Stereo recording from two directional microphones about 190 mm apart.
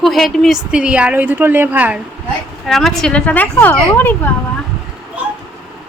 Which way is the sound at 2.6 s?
Centre (ahead or behind).